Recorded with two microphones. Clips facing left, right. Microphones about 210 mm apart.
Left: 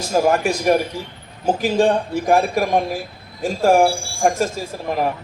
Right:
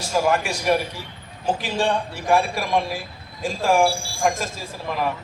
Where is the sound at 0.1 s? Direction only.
40° left (ahead or behind).